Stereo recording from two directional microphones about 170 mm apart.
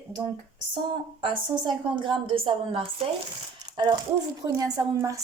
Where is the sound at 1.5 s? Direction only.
25° right (ahead or behind).